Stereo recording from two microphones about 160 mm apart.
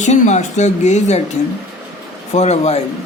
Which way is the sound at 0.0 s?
45° left (ahead or behind).